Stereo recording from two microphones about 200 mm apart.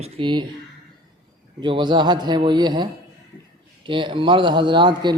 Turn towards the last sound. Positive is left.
turn(degrees=-25)  # may be behind; listen again after turning